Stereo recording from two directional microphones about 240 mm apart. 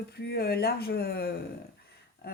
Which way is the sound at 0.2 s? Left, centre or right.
Left.